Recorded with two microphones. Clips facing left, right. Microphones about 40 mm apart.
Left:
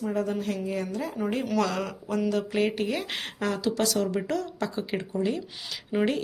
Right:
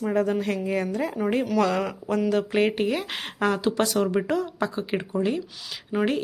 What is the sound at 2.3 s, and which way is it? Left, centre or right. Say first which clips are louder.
Speech: right 5 dB; right.